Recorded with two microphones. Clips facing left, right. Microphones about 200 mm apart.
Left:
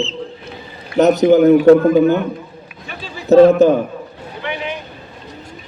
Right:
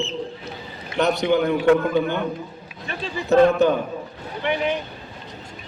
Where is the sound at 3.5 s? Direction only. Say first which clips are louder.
Left 7 dB; 40° left (ahead or behind).